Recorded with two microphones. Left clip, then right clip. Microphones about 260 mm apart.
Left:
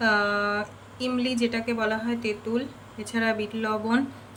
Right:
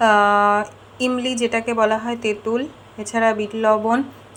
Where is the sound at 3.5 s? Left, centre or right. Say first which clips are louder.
Right 9 dB; centre.